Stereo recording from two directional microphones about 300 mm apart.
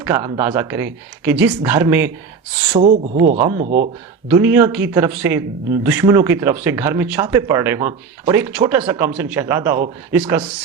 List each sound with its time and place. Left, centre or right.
0.0 s speech: centre
2.7 s speech: right
4.3 s speech: centre